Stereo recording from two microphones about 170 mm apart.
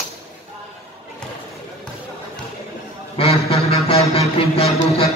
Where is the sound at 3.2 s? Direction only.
35° left (ahead or behind).